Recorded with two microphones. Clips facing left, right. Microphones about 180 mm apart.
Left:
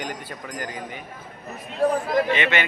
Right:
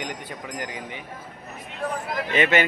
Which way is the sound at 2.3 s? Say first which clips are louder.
Right 3 dB; 40° right (ahead or behind).